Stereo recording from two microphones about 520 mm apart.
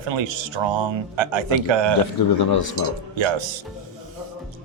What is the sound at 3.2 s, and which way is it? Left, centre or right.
Speech, right.